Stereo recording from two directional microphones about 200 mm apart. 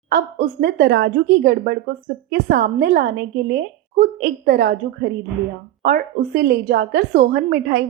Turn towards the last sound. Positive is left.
turn(degrees=-50)  # may be behind; listen again after turning